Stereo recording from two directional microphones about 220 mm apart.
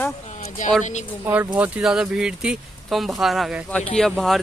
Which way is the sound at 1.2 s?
10° right (ahead or behind).